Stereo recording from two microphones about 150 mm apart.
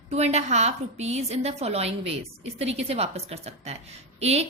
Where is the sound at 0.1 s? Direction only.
45° right (ahead or behind).